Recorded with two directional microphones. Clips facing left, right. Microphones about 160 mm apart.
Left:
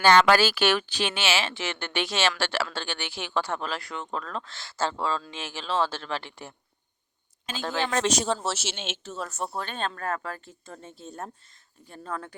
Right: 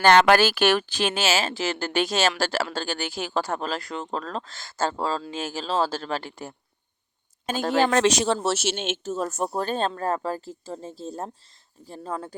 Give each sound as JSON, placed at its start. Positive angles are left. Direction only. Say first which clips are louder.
{"t": 0.0, "sound": "speech", "louder": "right 2 dB", "side_deg": -55}
{"t": 7.9, "sound": "speech", "louder": "right 5 dB", "side_deg": -85}
{"t": 8.4, "sound": "speech", "louder": "right 7 dB", "side_deg": -55}